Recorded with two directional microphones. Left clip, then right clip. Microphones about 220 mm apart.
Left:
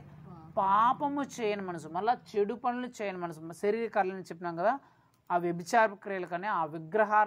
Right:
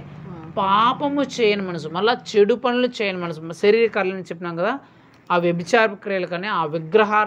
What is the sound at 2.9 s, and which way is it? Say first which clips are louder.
A woman's voice: right 12 dB; 45° left (ahead or behind).